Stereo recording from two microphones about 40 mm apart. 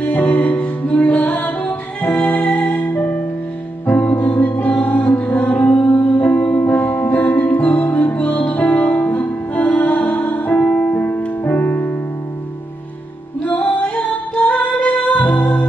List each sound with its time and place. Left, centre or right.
0.0 s music: left
3.9 s music: left
4.3 s music: left
13.5 s music: left